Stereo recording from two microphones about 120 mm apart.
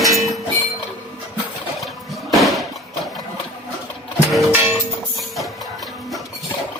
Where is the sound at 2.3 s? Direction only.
Centre (ahead or behind).